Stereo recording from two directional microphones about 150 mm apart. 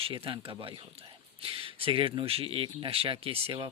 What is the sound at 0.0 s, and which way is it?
Speech, 35° right (ahead or behind).